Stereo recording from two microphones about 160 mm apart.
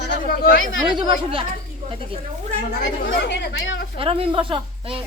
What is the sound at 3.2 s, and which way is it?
Speech, 90° left.